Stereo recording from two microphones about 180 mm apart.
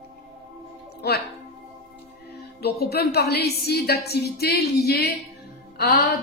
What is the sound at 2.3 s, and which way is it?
A woman's voice, 65° left (ahead or behind).